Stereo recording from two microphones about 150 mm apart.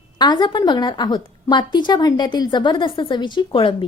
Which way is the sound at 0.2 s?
30° left (ahead or behind).